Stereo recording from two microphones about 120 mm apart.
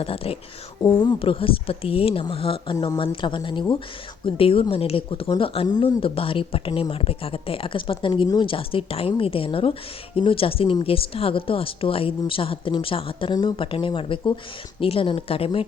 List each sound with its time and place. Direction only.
0.0 s speech: 55° left (ahead or behind)